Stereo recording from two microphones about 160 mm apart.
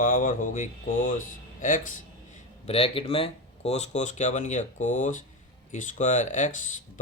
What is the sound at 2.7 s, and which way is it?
Speech, 35° left (ahead or behind).